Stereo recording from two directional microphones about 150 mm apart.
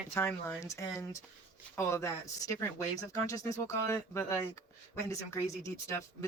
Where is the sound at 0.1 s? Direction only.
15° left (ahead or behind).